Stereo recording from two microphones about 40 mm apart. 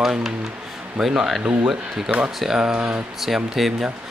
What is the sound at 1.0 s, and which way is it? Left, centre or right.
Speech, centre.